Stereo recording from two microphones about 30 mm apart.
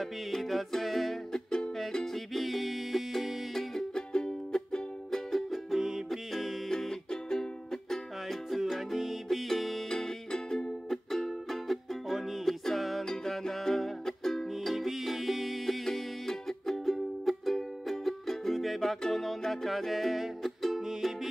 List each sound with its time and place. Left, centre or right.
0.0 s music: centre
3.9 s music: left
5.3 s music: centre
5.8 s music: centre
6.0 s music: centre
6.7 s music: centre
8.5 s music: centre
9.5 s music: centre
9.8 s music: left
10.9 s music: centre
12.4 s music: centre
13.0 s music: centre
14.6 s music: centre
14.9 s music: centre